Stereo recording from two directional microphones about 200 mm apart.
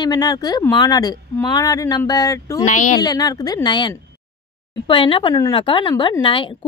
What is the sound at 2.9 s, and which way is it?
A woman's voice, 20° left (ahead or behind).